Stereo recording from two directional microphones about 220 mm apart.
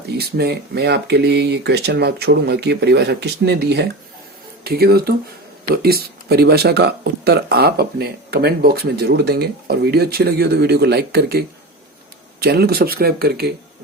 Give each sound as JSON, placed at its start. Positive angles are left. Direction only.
{"t": 0.2, "sound": "speech", "side_deg": -45}